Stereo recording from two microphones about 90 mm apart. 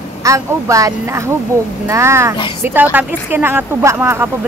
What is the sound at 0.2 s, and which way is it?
A woman's voice, 35° right (ahead or behind).